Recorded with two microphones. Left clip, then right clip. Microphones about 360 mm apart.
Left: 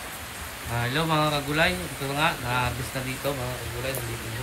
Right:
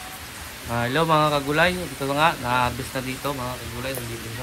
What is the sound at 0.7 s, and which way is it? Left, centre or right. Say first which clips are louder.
A man's voice: right 5 dB; centre.